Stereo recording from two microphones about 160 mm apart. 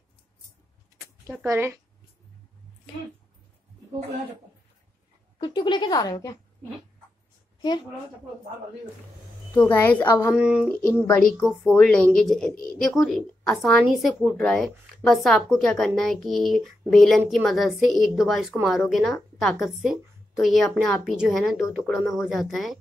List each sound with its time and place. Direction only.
1.2 s speech: 20° right (ahead or behind)
5.4 s a woman's voice: 25° left (ahead or behind)
9.6 s a woman's voice: 15° left (ahead or behind)
10.3 s speech: 5° right (ahead or behind)
11.7 s a woman's voice: 5° left (ahead or behind)